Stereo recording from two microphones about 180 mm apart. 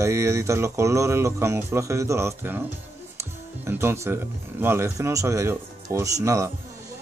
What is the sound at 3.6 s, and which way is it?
Speech, 15° right (ahead or behind).